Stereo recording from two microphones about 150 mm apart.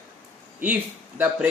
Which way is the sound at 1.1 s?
10° right (ahead or behind).